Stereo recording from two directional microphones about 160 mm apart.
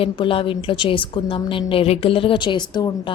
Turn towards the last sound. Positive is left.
turn(degrees=25)  # may be behind; listen again after turning